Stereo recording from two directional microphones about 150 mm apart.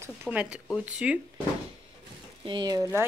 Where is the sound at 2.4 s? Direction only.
30° right (ahead or behind).